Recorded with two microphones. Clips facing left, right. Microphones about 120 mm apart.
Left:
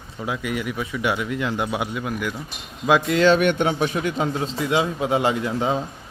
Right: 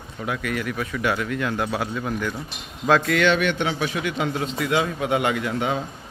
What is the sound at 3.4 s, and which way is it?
A man's voice, 45° left (ahead or behind).